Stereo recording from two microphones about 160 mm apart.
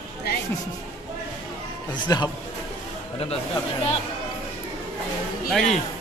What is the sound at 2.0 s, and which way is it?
Speech, 25° left (ahead or behind).